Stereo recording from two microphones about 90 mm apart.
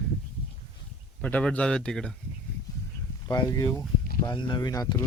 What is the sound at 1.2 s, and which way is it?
Speech, 15° left (ahead or behind).